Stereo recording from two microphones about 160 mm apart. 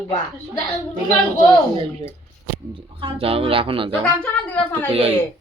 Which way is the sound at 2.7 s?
35° right (ahead or behind).